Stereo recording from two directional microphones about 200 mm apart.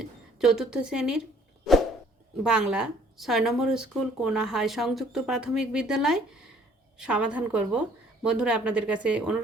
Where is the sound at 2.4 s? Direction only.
5° right (ahead or behind).